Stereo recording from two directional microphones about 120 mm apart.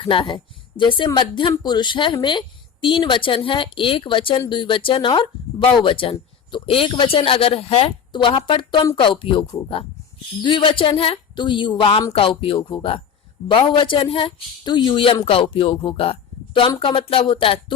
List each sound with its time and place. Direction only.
0.0 s speech: 45° left (ahead or behind)
10.4 s speech: 45° left (ahead or behind)